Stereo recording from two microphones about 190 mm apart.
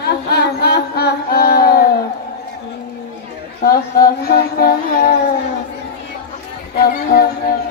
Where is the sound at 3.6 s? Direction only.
55° left (ahead or behind).